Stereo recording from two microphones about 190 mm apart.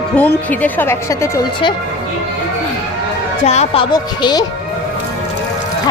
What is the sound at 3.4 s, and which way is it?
Speech, 35° left (ahead or behind).